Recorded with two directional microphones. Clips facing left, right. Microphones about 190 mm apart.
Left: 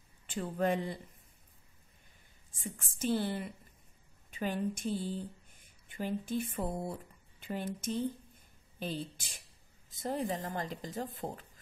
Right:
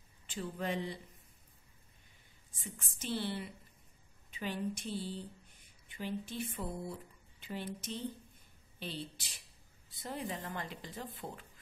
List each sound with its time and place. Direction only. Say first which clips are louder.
0.3 s a woman's voice: left 6 dB; 55° left (ahead or behind)
2.5 s a woman's voice: left 5 dB; 50° left (ahead or behind)